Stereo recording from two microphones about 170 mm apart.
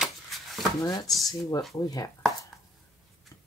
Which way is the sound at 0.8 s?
20° left (ahead or behind).